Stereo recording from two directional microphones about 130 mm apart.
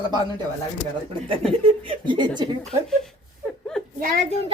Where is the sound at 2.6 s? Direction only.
5° left (ahead or behind).